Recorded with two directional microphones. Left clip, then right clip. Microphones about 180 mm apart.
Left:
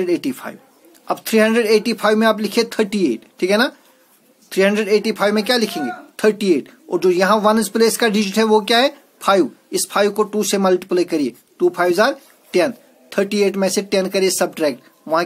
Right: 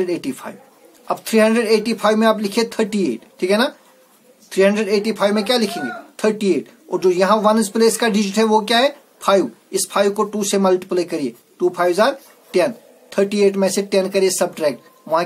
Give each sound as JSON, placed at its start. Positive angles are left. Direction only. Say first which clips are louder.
{"t": 0.0, "sound": "speech", "louder": "left 2 dB", "side_deg": 50}